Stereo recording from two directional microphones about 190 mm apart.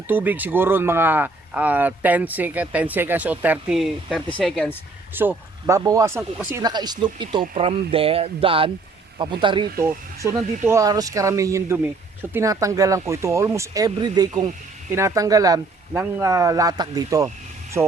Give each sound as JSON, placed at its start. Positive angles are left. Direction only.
{"t": 0.1, "sound": "speech", "side_deg": -10}
{"t": 5.1, "sound": "speech", "side_deg": -10}
{"t": 9.7, "sound": "speech", "side_deg": -15}